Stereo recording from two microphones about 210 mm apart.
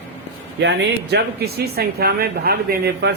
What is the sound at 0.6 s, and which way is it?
Speech, 55° right (ahead or behind).